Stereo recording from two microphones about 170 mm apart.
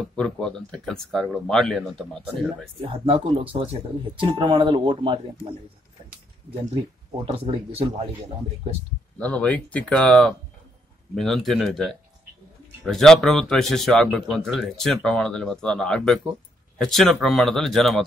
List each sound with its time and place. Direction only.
0.0 s a man's voice: 5° left (ahead or behind)
2.8 s speech: 30° right (ahead or behind)
7.2 s speech: 35° right (ahead or behind)
9.2 s a man's voice: 10° left (ahead or behind)